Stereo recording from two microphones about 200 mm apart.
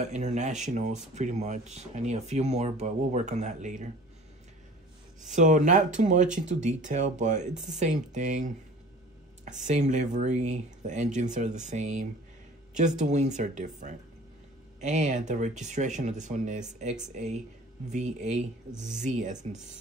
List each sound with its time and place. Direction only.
0.0 s speech: 35° right (ahead or behind)
5.3 s speech: 40° right (ahead or behind)
9.6 s speech: 40° right (ahead or behind)